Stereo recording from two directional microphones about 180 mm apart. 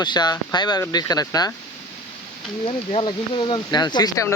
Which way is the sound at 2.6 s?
30° left (ahead or behind).